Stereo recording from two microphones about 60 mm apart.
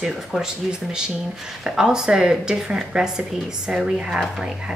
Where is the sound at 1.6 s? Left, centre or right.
Centre.